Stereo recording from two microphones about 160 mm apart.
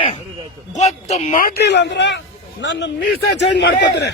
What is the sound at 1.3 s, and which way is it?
Speech, 75° left (ahead or behind).